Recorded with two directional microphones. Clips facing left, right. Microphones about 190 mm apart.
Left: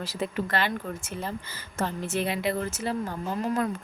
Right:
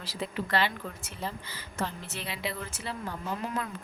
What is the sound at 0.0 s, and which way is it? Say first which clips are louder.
A woman's voice: left 5 dB; 45° left (ahead or behind).